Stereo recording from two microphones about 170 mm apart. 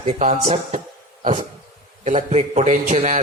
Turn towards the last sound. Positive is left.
turn(degrees=-45)  # may be behind; listen again after turning